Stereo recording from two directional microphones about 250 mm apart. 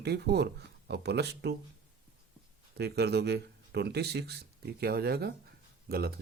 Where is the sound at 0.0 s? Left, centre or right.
Right.